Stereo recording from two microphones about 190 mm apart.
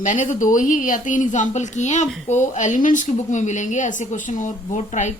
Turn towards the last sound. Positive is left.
turn(degrees=40)  # may be behind; listen again after turning